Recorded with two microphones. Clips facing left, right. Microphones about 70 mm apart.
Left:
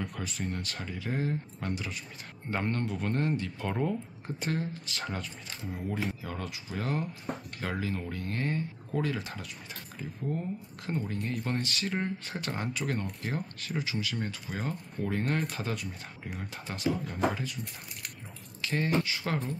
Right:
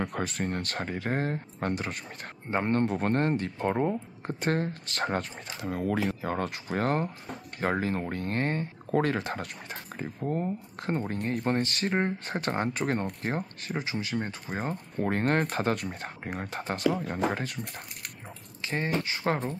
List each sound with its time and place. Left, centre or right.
0.0 s speech: right
2.5 s speech: right
2.9 s speech: right
4.3 s speech: right
18.7 s speech: right